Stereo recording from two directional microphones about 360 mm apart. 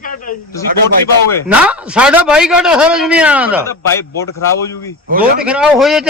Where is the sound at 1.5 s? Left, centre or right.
Centre.